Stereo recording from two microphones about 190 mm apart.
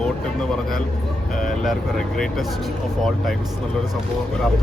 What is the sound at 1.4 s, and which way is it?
Speech, centre (ahead or behind).